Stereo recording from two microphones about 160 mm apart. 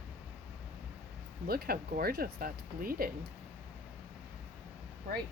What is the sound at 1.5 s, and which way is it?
Speech, 70° right (ahead or behind).